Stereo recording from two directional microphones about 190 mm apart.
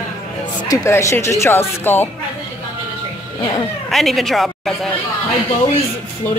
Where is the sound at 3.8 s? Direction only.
Centre (ahead or behind).